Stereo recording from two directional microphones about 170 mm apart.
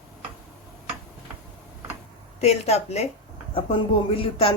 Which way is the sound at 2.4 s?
40° left (ahead or behind).